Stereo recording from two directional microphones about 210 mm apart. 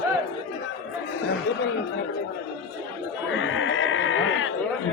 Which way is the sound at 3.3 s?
65° left (ahead or behind).